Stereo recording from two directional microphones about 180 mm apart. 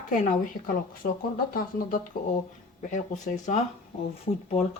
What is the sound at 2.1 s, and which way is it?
Speech, 50° left (ahead or behind).